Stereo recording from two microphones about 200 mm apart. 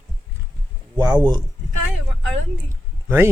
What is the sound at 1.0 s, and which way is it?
Speech, 20° right (ahead or behind).